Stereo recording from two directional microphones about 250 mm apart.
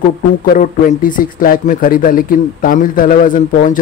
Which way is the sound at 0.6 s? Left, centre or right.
Left.